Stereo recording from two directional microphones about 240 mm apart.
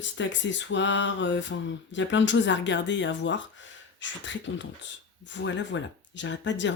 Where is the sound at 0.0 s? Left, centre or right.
Left.